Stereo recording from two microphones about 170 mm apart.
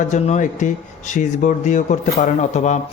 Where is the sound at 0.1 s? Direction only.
45° left (ahead or behind).